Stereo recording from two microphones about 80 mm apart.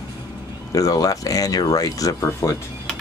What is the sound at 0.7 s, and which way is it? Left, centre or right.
Speech, left.